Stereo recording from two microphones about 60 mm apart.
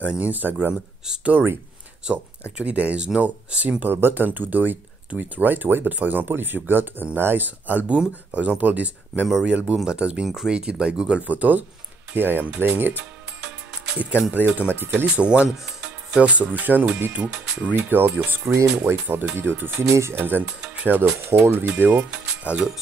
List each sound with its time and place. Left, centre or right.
0.1 s speech: right
2.5 s speech: right
3.9 s speech: right
9.8 s speech: centre
10.2 s speech: centre
10.5 s speech: centre; by 13.0 s right
14.3 s speech: right
15.0 s speech: right
15.6 s music: centre
16.2 s speech: right
19.8 s speech: right
20.2 s speech: right
20.4 s speech: centre
20.8 s speech: right